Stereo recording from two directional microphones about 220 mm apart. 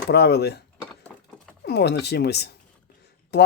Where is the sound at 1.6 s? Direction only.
50° left (ahead or behind).